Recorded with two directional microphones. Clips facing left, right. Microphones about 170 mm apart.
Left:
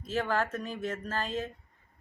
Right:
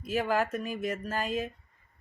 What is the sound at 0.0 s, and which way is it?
Speech, 10° right (ahead or behind).